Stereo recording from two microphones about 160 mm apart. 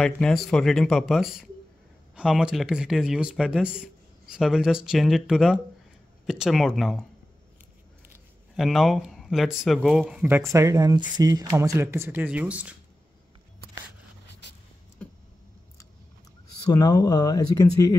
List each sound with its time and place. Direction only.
0.0 s speech: 5° left (ahead or behind)
8.5 s speech: centre (ahead or behind)
15.0 s a sound: 10° left (ahead or behind)
16.7 s speech: 25° left (ahead or behind)